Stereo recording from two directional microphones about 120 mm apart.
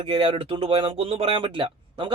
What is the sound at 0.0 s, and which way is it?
Speech, 45° right (ahead or behind).